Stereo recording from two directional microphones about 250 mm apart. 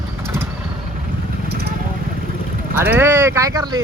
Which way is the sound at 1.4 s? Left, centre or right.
Right.